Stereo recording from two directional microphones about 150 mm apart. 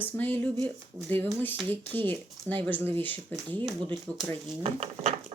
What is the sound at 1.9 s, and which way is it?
Speech, 10° left (ahead or behind).